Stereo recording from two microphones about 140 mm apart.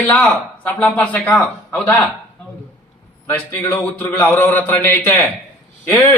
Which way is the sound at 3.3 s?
15° left (ahead or behind).